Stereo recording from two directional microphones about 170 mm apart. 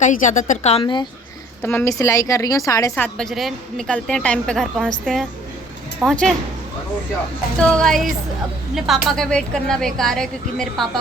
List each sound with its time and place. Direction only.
0.0 s a woman's voice: 50° left (ahead or behind); by 1.0 s 30° left (ahead or behind)
1.6 s a woman's voice: 15° left (ahead or behind)
7.7 s speech: 5° left (ahead or behind)